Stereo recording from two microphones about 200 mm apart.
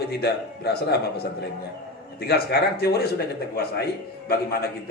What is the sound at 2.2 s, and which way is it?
Speech, 50° left (ahead or behind).